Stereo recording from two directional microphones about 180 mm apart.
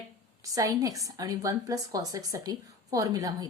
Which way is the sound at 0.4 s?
20° right (ahead or behind).